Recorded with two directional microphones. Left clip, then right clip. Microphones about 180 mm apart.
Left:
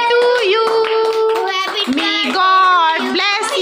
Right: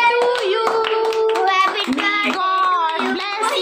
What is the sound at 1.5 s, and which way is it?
Child singing, 35° right (ahead or behind).